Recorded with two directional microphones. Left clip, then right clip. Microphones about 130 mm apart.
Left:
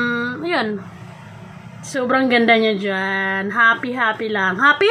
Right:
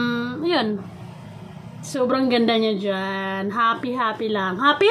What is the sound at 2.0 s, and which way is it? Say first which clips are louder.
Speech: left 6 dB; centre (ahead or behind).